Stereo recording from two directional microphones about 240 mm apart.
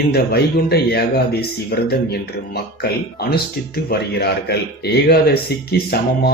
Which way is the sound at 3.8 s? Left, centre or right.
Left.